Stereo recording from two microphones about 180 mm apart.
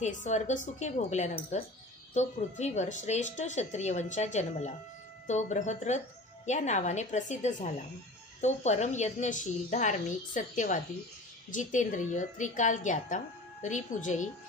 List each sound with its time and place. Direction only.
0.0 s a woman's voice: 40° left (ahead or behind)